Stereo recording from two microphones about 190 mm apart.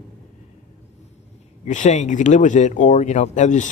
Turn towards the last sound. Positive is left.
turn(degrees=40)  # may be behind; listen again after turning